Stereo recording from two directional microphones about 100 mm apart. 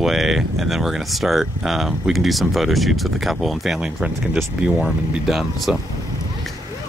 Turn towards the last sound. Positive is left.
turn(degrees=0)  # may be behind; listen again after turning